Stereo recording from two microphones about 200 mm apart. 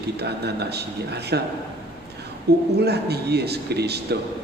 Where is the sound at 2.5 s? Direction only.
55° right (ahead or behind).